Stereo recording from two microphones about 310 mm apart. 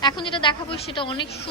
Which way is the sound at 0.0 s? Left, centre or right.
Centre.